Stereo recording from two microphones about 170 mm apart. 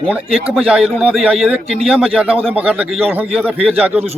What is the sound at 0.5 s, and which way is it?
A man's voice, 5° right (ahead or behind).